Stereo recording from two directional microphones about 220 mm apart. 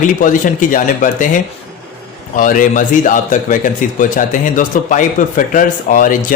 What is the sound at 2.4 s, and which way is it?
A man's voice, 35° left (ahead or behind).